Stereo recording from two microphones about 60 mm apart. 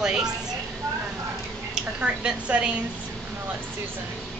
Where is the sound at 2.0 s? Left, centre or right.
Right.